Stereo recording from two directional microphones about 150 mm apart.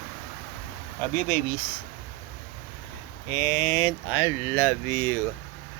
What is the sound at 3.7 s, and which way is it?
Speech, 30° left (ahead or behind).